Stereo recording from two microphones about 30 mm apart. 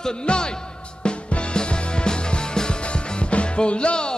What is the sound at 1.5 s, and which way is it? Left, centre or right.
Music, left.